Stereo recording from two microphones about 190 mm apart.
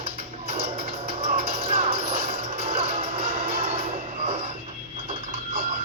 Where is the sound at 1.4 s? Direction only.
30° right (ahead or behind).